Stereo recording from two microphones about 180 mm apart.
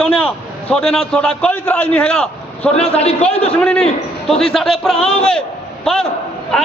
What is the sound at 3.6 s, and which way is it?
A man's voice, 5° left (ahead or behind).